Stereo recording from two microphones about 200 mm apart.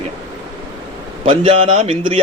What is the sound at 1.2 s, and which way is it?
Speech, 30° right (ahead or behind).